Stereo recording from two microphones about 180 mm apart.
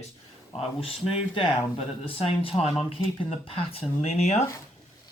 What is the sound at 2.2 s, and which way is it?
Speech, 30° left (ahead or behind).